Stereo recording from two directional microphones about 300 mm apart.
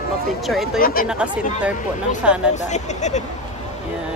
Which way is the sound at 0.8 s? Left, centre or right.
Left.